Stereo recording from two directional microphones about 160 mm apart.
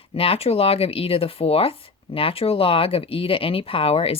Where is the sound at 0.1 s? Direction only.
35° left (ahead or behind).